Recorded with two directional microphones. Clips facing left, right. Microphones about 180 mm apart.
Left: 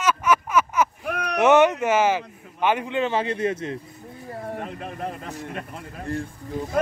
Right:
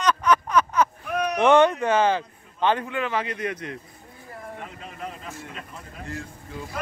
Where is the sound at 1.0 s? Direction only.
65° left (ahead or behind).